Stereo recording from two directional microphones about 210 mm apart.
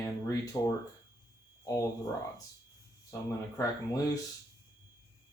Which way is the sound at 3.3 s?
15° left (ahead or behind).